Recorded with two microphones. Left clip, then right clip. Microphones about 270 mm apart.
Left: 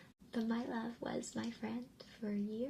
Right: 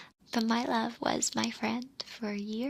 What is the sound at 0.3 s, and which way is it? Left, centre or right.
A woman's voice, right.